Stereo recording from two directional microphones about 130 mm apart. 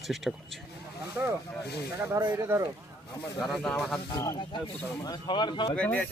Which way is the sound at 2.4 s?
20° right (ahead or behind).